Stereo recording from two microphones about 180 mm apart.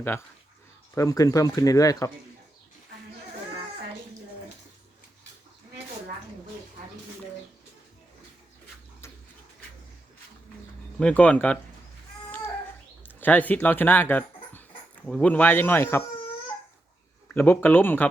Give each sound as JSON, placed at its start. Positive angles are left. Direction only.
{"t": 0.9, "sound": "speech", "side_deg": 20}
{"t": 10.9, "sound": "speech", "side_deg": 5}
{"t": 13.0, "sound": "speech", "side_deg": 10}
{"t": 17.3, "sound": "speech", "side_deg": 10}